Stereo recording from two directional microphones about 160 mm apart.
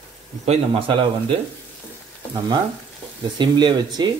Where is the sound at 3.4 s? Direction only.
30° right (ahead or behind).